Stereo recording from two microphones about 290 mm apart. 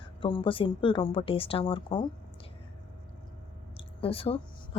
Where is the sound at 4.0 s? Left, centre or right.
Centre.